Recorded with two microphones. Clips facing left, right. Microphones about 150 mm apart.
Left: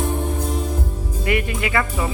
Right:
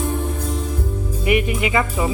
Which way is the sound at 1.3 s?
20° right (ahead or behind).